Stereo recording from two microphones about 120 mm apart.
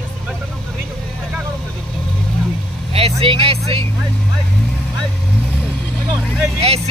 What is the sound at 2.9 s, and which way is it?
Vehicle, 55° right (ahead or behind).